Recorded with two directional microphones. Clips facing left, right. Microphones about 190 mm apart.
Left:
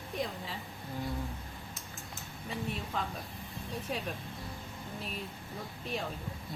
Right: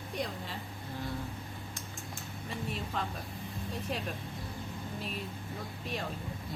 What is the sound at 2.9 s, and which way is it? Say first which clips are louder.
Speech: even; centre (ahead or behind).